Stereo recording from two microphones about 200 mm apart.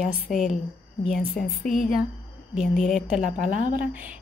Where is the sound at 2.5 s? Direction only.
Centre (ahead or behind).